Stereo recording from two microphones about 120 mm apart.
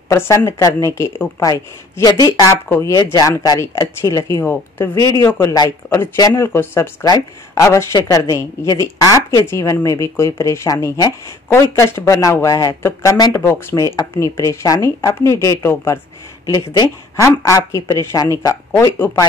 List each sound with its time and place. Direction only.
0.1 s speech: 25° left (ahead or behind)
16.4 s speech: 35° left (ahead or behind)
17.2 s speech: 20° left (ahead or behind)